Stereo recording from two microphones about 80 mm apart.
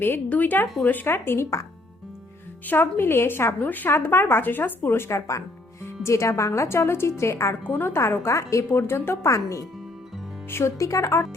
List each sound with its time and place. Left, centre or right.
0.0 s a woman's voice: left
2.6 s a woman's voice: left